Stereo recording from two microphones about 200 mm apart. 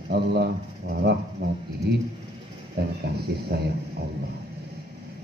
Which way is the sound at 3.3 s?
55° right (ahead or behind).